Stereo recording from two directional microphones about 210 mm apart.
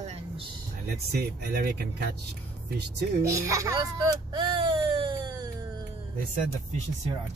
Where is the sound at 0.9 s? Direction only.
50° right (ahead or behind).